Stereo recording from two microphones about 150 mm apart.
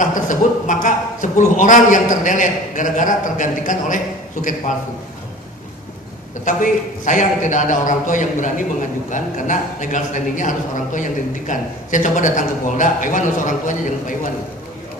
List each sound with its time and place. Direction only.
0.0 s a man's voice: 60° left (ahead or behind)
6.4 s a man's voice: 55° left (ahead or behind)